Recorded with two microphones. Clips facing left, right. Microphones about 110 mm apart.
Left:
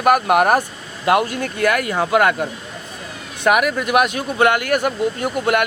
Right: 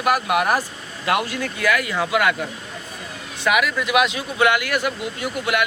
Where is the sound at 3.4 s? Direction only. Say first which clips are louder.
Left 4 dB; 50° left (ahead or behind).